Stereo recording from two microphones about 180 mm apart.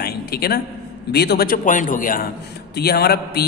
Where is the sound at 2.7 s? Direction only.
60° left (ahead or behind).